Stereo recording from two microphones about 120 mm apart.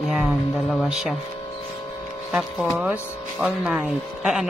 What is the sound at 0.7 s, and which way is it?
Speech, 5° right (ahead or behind).